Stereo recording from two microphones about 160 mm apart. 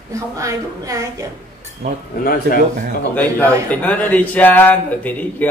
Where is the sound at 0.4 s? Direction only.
20° right (ahead or behind).